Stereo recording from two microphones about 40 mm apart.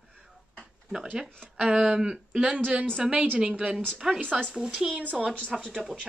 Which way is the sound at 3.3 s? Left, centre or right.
Right.